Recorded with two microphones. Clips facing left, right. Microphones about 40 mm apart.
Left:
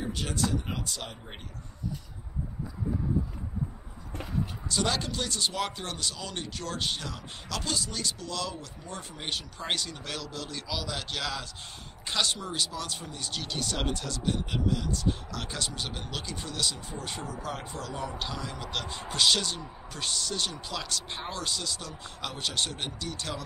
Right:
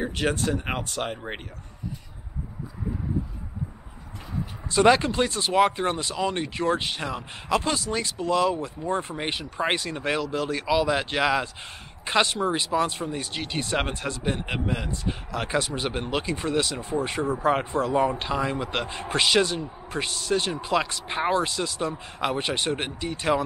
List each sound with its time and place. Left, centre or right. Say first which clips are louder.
0.0 s speech: right 6 dB; right
4.6 s speech: right 13 dB; right